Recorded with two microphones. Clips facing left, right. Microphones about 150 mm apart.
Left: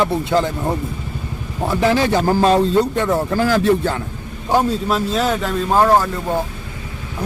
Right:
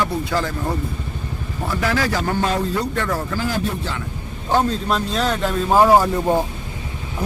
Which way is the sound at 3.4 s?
90° left.